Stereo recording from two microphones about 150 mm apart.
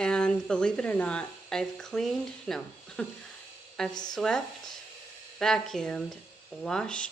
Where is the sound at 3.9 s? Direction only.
25° left (ahead or behind).